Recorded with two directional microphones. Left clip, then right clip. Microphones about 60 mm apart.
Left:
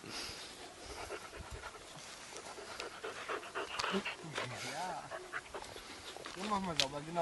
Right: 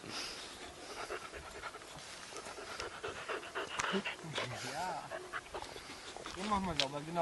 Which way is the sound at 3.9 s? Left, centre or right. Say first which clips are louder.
Right 1 dB; centre.